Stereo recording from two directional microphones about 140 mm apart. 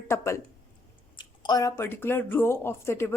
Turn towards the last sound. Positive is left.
turn(degrees=20)  # may be behind; listen again after turning